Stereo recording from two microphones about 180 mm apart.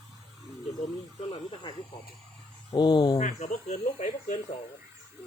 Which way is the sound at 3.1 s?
40° left (ahead or behind).